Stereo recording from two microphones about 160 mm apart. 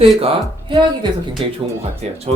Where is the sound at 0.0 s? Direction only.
35° right (ahead or behind).